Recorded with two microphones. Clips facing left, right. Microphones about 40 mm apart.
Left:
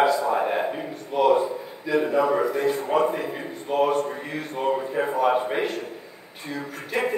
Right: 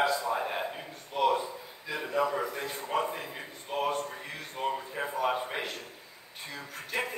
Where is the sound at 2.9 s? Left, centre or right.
Left.